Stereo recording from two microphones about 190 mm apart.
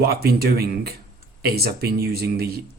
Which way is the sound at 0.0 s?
55° right (ahead or behind).